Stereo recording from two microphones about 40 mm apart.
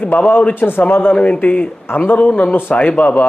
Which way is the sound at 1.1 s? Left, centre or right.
Left.